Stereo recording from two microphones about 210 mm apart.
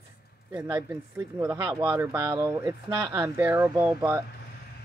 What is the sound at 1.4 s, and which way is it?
Speech, 10° right (ahead or behind).